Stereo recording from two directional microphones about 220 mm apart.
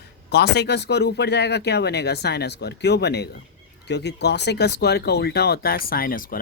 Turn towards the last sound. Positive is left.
turn(degrees=40)  # may be behind; listen again after turning